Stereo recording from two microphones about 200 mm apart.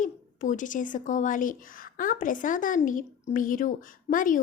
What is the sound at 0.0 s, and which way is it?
A woman's voice, 40° left (ahead or behind).